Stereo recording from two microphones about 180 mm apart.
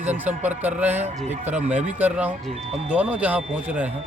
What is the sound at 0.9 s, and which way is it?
Speech, 40° right (ahead or behind).